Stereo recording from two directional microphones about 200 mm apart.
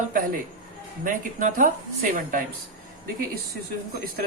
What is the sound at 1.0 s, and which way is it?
Speech, 40° right (ahead or behind).